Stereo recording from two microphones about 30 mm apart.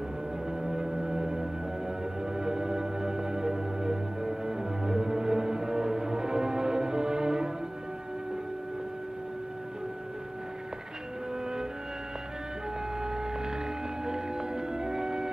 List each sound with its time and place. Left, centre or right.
0.5 s music: right
13.0 s a sound: right
14.0 s music: right